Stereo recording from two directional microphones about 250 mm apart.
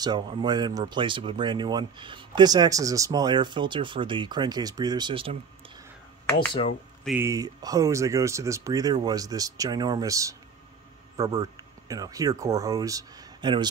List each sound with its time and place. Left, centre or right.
0.0 s speech: centre
7.1 s speech: centre